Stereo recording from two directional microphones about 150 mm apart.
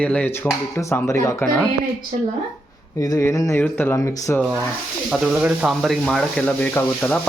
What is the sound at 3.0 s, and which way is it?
Speech, 20° left (ahead or behind).